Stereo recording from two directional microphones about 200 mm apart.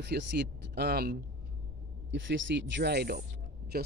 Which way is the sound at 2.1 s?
65° right (ahead or behind).